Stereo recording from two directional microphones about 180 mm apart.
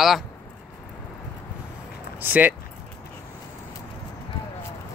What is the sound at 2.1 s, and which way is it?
Speech, 10° right (ahead or behind).